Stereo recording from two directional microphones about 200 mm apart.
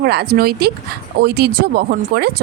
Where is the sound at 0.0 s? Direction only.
55° right (ahead or behind).